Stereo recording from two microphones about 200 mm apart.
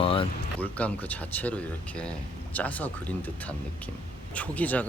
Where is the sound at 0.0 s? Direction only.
25° left (ahead or behind).